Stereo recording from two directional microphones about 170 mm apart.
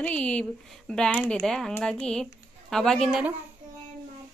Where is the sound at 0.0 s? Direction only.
5° left (ahead or behind).